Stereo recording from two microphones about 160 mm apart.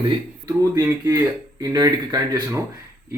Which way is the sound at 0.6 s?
20° right (ahead or behind).